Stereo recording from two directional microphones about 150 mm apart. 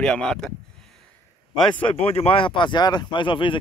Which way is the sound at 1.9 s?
40° left (ahead or behind).